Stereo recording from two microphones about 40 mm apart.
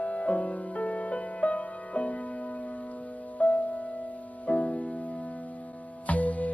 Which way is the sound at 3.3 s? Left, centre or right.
Left.